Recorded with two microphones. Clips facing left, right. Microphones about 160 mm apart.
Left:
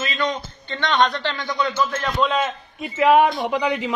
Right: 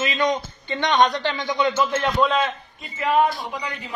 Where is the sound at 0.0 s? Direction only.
15° right (ahead or behind).